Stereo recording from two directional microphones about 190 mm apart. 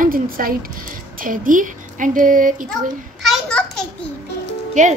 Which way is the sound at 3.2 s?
Centre (ahead or behind).